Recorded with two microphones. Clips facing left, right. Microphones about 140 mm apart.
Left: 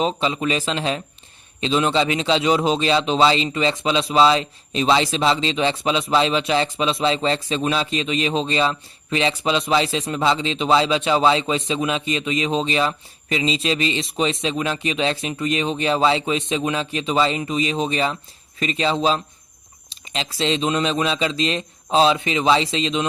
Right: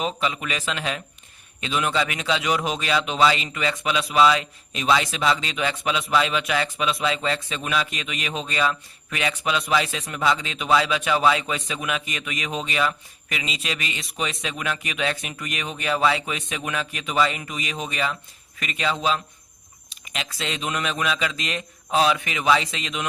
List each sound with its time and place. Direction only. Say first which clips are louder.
0.0 s a man's voice: left 5 dB; 30° left (ahead or behind)